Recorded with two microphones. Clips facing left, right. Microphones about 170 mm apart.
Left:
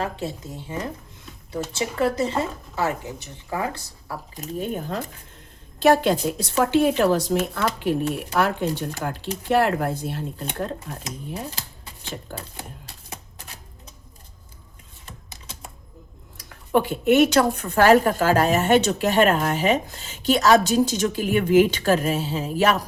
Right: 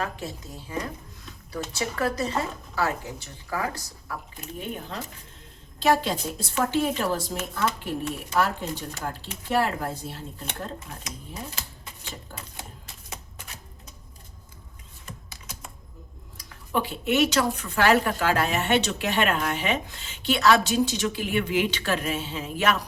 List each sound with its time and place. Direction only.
0.0 s speech: 25° left (ahead or behind)
2.0 s speech: 25° left (ahead or behind)
4.4 s speech: 40° left (ahead or behind)
5.8 s speech: 60° left (ahead or behind)
12.3 s typewriter: 35° left (ahead or behind)
15.3 s typing: 25° left (ahead or behind)
16.7 s speech: 50° left (ahead or behind)